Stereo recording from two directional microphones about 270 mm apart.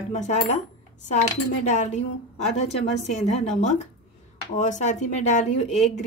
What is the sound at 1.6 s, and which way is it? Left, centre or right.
Speech, left.